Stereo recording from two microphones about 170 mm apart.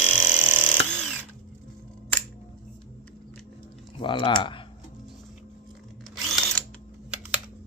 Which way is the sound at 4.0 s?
30° left (ahead or behind).